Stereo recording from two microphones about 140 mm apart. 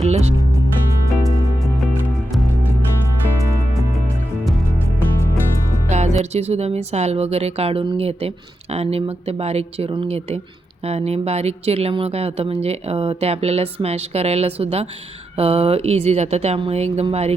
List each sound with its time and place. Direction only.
0.0 s music: 50° right (ahead or behind)
5.9 s speech: 50° right (ahead or behind)